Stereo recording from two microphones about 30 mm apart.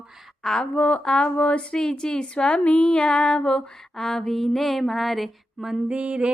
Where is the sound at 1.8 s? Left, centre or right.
Left.